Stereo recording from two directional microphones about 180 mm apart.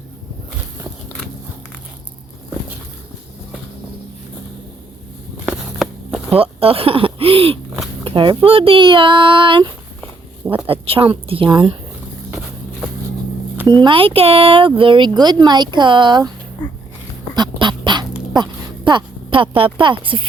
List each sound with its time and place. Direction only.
5.5 s a sound: centre (ahead or behind)
6.3 s a woman's voice: 30° right (ahead or behind)
13.7 s speech: 30° right (ahead or behind)
17.3 s duck: 25° right (ahead or behind)
18.9 s a woman's voice: 25° right (ahead or behind)